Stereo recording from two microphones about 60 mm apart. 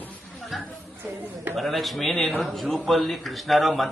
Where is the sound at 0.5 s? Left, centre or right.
Centre.